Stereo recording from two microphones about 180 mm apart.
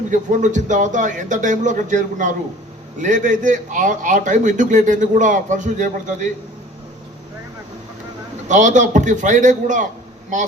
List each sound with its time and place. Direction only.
0.1 s a man's voice: 45° right (ahead or behind)
8.4 s a man's voice: 45° right (ahead or behind)